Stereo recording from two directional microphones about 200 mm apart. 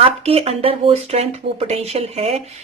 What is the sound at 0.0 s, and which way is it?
Speech, 30° right (ahead or behind).